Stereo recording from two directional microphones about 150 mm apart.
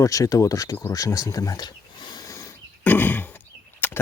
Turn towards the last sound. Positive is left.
turn(degrees=15)  # may be behind; listen again after turning